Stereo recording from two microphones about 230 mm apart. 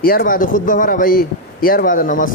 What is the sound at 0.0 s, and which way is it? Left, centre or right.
A man's voice, left.